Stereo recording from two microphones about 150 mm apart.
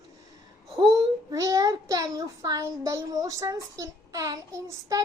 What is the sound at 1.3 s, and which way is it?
A child's voice, 20° right (ahead or behind).